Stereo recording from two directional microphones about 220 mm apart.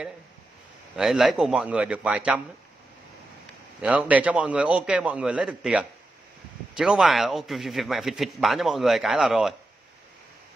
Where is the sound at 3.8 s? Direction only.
5° right (ahead or behind).